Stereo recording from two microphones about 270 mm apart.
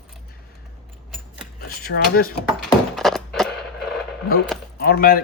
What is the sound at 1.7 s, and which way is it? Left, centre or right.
Speech, left.